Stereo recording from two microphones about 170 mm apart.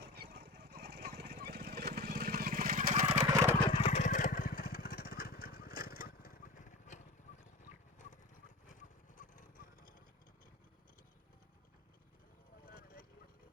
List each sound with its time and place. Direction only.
0.0 s vehicle: 80° right; by 3.2 s 45° right (ahead or behind)
3.6 s vehicle: 30° left (ahead or behind)
8.0 s clip-clop: 45° left (ahead or behind)
8.6 s a sound: 50° left (ahead or behind)
12.6 s vehicle: 60° left (ahead or behind)